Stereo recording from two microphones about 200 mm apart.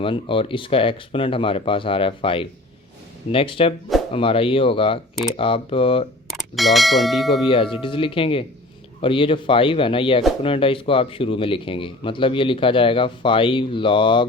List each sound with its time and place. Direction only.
0.0 s speech: 25° left (ahead or behind)
6.6 s speech: centre (ahead or behind)
7.4 s speech: 25° left (ahead or behind)